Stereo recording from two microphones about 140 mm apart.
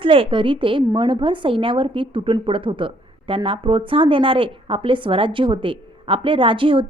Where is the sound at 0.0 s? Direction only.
40° right (ahead or behind).